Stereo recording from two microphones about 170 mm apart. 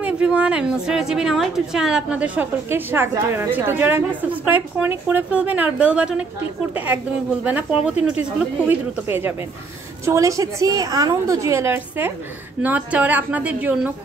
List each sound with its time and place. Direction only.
0.0 s a woman's voice: 5° right (ahead or behind)